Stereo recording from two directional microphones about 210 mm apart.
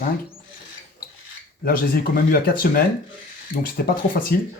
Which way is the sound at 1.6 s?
45° left (ahead or behind).